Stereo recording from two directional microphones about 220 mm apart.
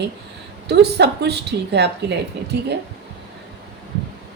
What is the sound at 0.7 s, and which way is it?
A woman's voice, 50° right (ahead or behind).